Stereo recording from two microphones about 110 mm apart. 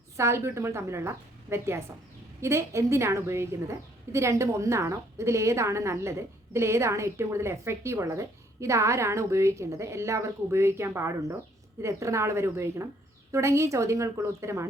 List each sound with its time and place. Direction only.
0.2 s a woman's voice: 25° right (ahead or behind)